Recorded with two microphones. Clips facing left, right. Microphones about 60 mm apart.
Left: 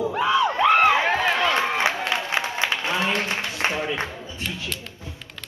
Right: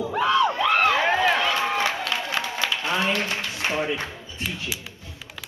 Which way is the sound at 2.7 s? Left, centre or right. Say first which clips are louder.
Right 2 dB; left.